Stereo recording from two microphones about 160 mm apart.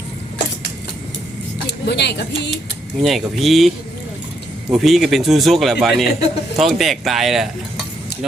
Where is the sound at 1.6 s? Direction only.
90° left.